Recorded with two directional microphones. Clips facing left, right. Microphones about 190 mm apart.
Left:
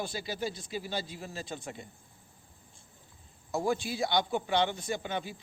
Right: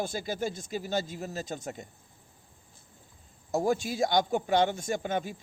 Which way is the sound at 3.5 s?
45° right (ahead or behind).